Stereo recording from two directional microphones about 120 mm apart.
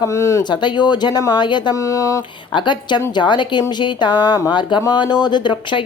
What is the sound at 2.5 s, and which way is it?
Speech, 40° left (ahead or behind).